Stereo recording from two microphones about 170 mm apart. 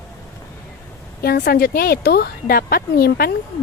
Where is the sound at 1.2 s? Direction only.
65° left (ahead or behind).